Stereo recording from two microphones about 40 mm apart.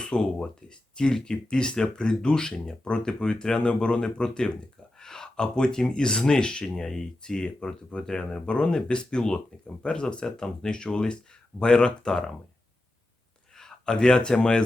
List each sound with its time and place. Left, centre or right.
0.0 s speech: centre
13.6 s speech: centre